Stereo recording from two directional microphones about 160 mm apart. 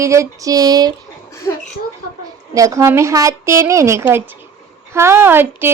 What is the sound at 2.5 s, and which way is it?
Speech, 20° right (ahead or behind).